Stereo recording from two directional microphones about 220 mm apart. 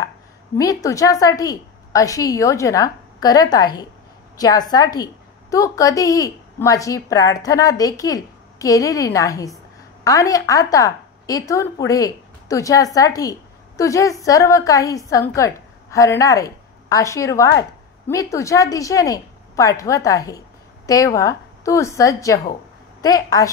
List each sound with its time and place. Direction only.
0.6 s a woman's voice: 15° left (ahead or behind)